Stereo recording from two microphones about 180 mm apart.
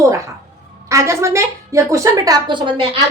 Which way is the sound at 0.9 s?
15° right (ahead or behind).